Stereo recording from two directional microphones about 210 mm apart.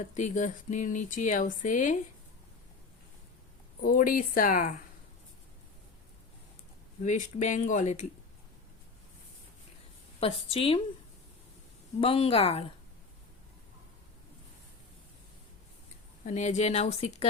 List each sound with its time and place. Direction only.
0.1 s speech: 35° left (ahead or behind)
3.8 s speech: 45° left (ahead or behind)
7.0 s speech: 35° left (ahead or behind)
10.2 s a woman's voice: 25° left (ahead or behind)
11.9 s a woman's voice: 25° left (ahead or behind)
16.2 s speech: 35° left (ahead or behind)